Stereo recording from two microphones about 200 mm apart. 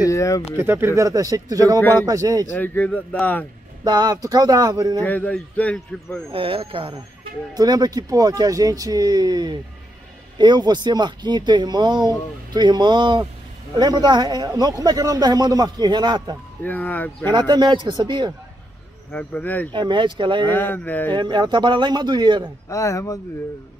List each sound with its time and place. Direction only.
0.0 s speech: 15° left (ahead or behind)
0.6 s speech: 10° right (ahead or behind)
2.5 s speech: 10° left (ahead or behind)
3.8 s a man's voice: 20° right (ahead or behind)
5.0 s speech: 10° left (ahead or behind)
6.3 s a man's voice: 25° right (ahead or behind)
16.6 s speech: 10° left (ahead or behind)
17.3 s a man's voice: 20° right (ahead or behind)
19.1 s speech: 5° left (ahead or behind)
19.7 s a man's voice: 25° right (ahead or behind)
20.4 s speech: 10° left (ahead or behind)
21.1 s a man's voice: 20° right (ahead or behind)
22.7 s speech: 15° left (ahead or behind)